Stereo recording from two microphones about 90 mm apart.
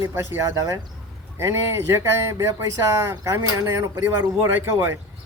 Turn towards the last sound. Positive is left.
turn(degrees=-25)  # may be behind; listen again after turning